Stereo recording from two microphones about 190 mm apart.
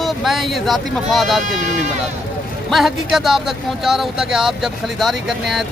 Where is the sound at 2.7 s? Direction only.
Centre (ahead or behind).